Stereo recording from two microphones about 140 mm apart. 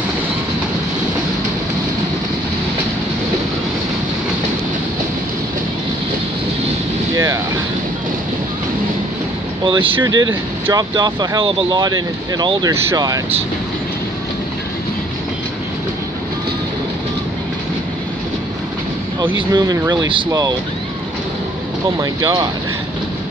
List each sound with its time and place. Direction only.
9.7 s speech: 40° right (ahead or behind)
19.2 s speech: 25° right (ahead or behind)
22.0 s speech: 25° right (ahead or behind)